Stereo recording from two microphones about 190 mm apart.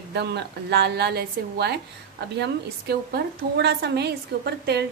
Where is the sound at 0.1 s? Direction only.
60° right (ahead or behind).